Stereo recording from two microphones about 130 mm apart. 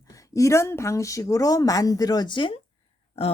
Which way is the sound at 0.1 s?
25° left (ahead or behind).